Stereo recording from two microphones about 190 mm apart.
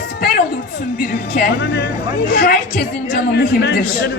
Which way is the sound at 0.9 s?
45° left (ahead or behind).